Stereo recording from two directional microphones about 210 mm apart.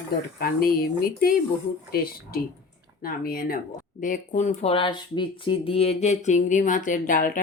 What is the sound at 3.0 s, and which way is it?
A woman's voice, 45° left (ahead or behind).